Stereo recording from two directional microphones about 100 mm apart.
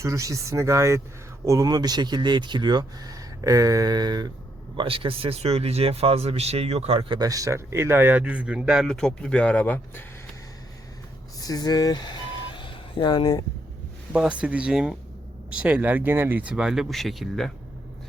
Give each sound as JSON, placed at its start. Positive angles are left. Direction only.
{"t": 0.0, "sound": "speech", "side_deg": -35}
{"t": 4.8, "sound": "speech", "side_deg": -65}
{"t": 7.2, "sound": "speech", "side_deg": -35}
{"t": 8.2, "sound": "speech", "side_deg": -10}
{"t": 9.0, "sound": "speech", "side_deg": 10}
{"t": 11.3, "sound": "vehicle", "side_deg": 40}
{"t": 14.1, "sound": "speech", "side_deg": -10}